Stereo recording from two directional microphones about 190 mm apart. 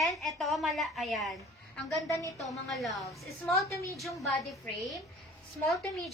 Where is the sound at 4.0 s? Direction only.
Centre (ahead or behind).